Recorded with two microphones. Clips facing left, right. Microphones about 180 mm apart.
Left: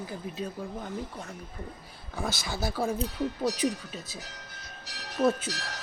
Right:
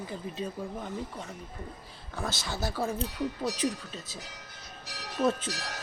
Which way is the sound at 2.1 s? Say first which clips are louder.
Left 1 dB; 10° left (ahead or behind).